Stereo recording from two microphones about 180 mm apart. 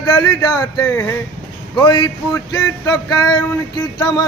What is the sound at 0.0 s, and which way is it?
Speech, 20° left (ahead or behind).